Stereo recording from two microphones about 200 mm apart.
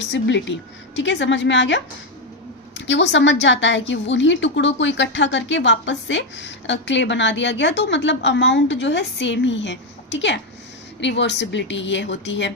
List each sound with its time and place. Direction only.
0.1 s a woman's voice: 65° left (ahead or behind)